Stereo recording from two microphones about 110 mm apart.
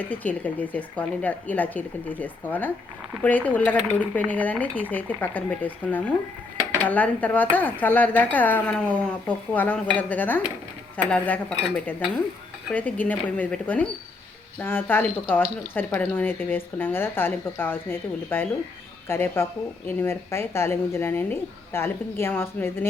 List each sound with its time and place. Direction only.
0.1 s speech: 15° left (ahead or behind)